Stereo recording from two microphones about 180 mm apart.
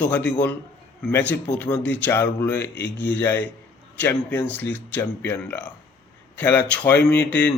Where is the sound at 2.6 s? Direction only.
70° left (ahead or behind).